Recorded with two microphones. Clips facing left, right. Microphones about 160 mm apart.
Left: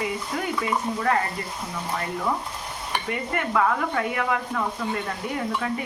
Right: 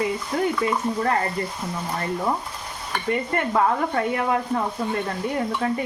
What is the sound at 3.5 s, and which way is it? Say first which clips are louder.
Speech: right 2 dB; 35° right (ahead or behind).